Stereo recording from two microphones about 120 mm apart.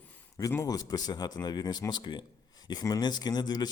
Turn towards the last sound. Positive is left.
turn(degrees=35)  # may be behind; listen again after turning